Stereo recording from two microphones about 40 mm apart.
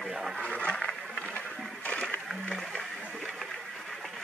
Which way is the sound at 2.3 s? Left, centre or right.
Centre.